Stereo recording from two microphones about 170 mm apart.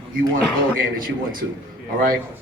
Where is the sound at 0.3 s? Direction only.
55° right (ahead or behind).